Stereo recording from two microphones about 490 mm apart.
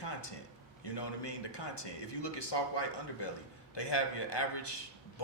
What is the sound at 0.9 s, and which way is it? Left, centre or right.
A man's voice, left.